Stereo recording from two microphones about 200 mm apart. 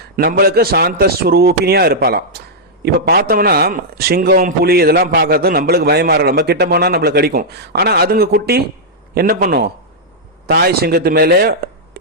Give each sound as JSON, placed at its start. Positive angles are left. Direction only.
{"t": 0.2, "sound": "a man's voice", "side_deg": -50}